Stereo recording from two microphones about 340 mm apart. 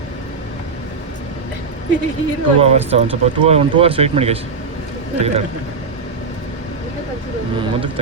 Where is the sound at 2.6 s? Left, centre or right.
Centre.